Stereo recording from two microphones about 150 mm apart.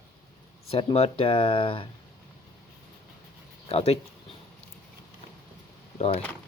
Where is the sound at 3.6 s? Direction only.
40° left (ahead or behind).